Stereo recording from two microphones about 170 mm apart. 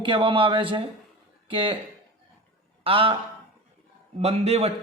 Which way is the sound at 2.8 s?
30° right (ahead or behind).